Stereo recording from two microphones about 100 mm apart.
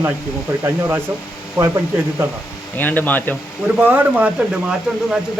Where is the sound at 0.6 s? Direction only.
20° right (ahead or behind).